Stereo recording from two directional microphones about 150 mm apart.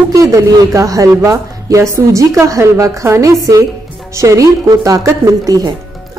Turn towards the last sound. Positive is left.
turn(degrees=-25)  # may be behind; listen again after turning